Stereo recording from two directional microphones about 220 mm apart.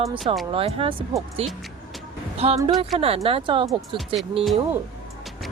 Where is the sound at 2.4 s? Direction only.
25° right (ahead or behind).